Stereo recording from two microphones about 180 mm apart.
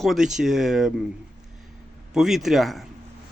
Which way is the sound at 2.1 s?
Centre (ahead or behind).